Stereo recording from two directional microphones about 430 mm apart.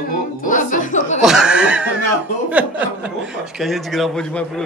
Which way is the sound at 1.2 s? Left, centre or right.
Centre.